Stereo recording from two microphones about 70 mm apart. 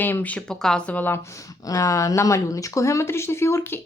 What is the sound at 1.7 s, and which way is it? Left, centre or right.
Speech, left.